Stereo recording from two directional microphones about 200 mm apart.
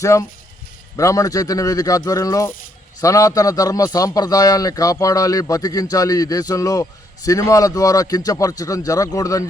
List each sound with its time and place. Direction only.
0.0 s a man's voice: 15° left (ahead or behind)